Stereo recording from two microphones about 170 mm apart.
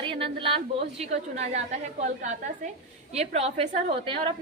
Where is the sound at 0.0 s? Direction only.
30° right (ahead or behind).